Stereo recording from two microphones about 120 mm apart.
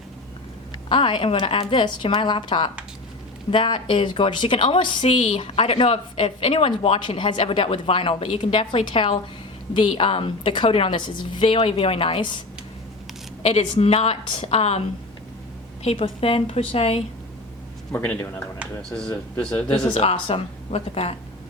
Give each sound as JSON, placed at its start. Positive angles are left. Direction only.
{"t": 0.9, "sound": "a woman's voice", "side_deg": 45}
{"t": 13.4, "sound": "a woman's voice", "side_deg": 60}
{"t": 17.9, "sound": "a man's voice", "side_deg": 10}
{"t": 19.9, "sound": "a woman's voice", "side_deg": 55}